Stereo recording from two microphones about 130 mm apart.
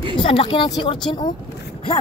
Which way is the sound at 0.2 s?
45° left (ahead or behind).